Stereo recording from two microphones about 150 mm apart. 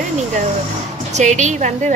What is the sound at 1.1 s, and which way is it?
Speech, 50° right (ahead or behind).